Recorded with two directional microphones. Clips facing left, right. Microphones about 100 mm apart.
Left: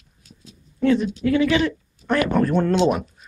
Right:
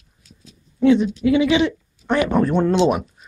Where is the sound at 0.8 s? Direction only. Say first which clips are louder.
Right 4 dB; 15° right (ahead or behind).